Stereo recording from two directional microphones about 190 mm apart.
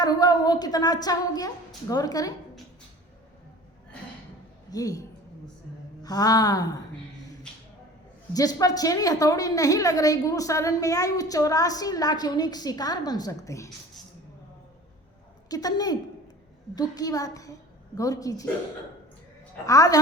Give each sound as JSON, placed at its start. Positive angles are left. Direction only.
{"t": 0.0, "sound": "a woman's voice", "side_deg": 20}
{"t": 4.7, "sound": "a woman's voice", "side_deg": 20}
{"t": 8.3, "sound": "a woman's voice", "side_deg": 20}
{"t": 15.4, "sound": "a woman's voice", "side_deg": 20}
{"t": 19.6, "sound": "a woman's voice", "side_deg": 20}